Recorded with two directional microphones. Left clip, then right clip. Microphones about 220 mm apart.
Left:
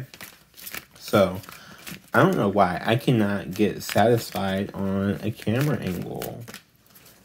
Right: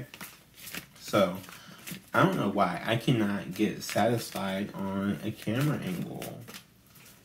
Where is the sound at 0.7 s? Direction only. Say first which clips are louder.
Left 6 dB; 50° left (ahead or behind).